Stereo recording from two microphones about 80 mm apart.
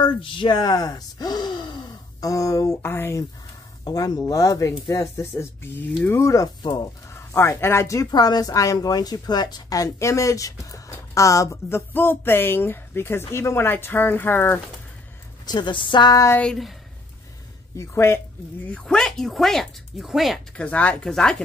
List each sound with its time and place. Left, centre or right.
0.0 s speech: left
3.9 s a woman's voice: left
6.6 s speech: left
7.1 s speech: left
8.1 s a woman's voice: left
15.4 s a woman's voice: left
17.7 s a woman's voice: left
18.7 s speech: centre
20.5 s speech: centre